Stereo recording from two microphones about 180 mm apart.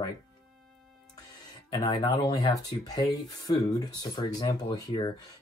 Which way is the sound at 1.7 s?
25° left (ahead or behind).